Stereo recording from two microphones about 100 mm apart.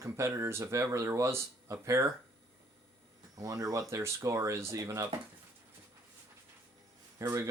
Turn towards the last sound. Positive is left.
turn(degrees=-25)  # may be behind; listen again after turning